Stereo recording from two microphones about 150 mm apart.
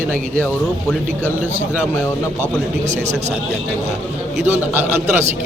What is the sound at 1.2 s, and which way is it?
Speech, 10° right (ahead or behind).